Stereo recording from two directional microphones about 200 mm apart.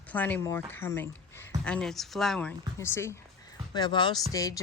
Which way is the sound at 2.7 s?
10° left (ahead or behind).